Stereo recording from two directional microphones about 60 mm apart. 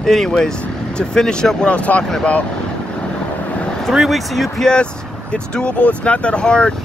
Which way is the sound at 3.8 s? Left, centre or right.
Centre.